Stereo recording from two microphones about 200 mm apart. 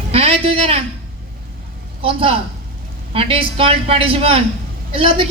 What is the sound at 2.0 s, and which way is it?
A woman's voice, 25° right (ahead or behind).